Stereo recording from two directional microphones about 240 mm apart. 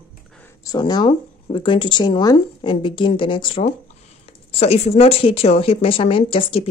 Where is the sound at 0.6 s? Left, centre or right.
Centre.